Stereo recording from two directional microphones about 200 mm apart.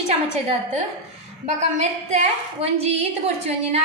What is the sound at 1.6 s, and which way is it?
A woman's voice, 35° right (ahead or behind).